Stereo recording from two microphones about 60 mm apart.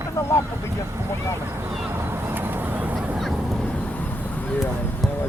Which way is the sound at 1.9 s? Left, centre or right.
Right.